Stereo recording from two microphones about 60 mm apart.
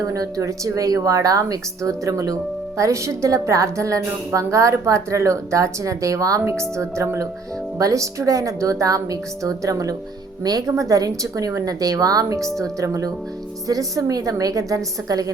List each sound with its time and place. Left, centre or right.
0.0 s a woman's voice: right
6.4 s a woman's voice: right
7.8 s a woman's voice: right
12.5 s speech: centre
12.8 s a woman's voice: right
13.7 s speech: right